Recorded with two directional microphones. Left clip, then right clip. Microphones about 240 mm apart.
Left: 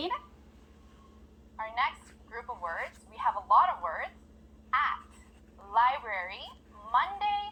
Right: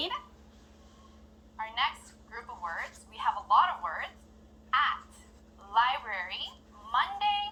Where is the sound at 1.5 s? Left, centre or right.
Left.